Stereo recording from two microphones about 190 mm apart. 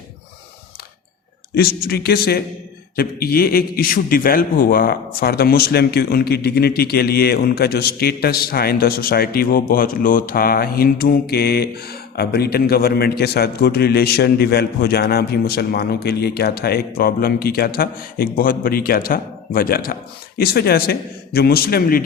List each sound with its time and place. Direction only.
1.5 s a man's voice: 55° left (ahead or behind)